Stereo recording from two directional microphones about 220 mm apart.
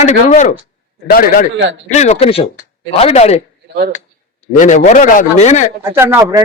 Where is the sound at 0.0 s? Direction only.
35° left (ahead or behind).